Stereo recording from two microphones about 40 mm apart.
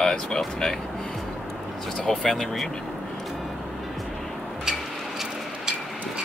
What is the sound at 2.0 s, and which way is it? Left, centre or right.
Speech, centre.